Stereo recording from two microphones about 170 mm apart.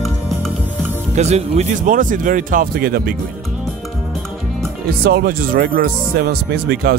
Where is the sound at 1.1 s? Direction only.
40° right (ahead or behind); by 3.2 s 60° right (ahead or behind).